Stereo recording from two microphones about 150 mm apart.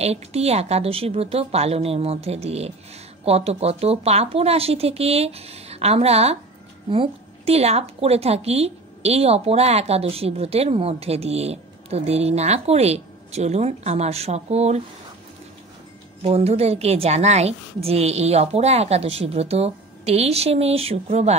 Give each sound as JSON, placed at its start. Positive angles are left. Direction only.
{"t": 0.0, "sound": "a woman's voice", "side_deg": -45}
{"t": 16.2, "sound": "a woman's voice", "side_deg": -45}